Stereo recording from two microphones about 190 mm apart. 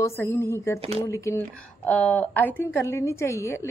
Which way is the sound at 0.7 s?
30° right (ahead or behind).